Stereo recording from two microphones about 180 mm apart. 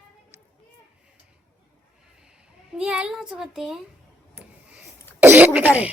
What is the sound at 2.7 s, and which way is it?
Speech, 5° right (ahead or behind).